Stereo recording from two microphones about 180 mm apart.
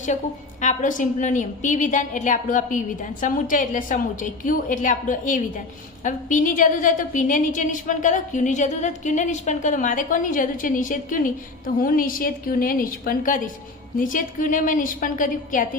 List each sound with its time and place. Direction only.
0.6 s a woman's voice: 45° left (ahead or behind)